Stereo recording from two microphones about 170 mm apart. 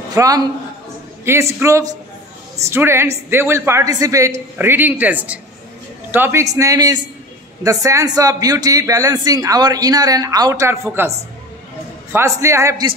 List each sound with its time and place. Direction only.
0.1 s a man's voice: 20° right (ahead or behind)